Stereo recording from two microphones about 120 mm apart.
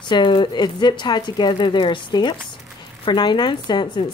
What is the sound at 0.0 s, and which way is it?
Speech, 40° left (ahead or behind).